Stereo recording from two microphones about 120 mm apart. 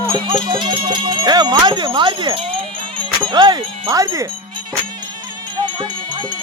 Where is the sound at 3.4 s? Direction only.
35° right (ahead or behind).